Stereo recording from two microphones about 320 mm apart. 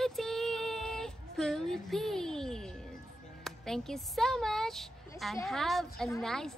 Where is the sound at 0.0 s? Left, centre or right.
Centre.